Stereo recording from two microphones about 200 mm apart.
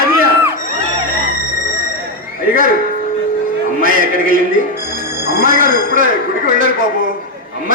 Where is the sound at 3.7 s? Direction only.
45° right (ahead or behind).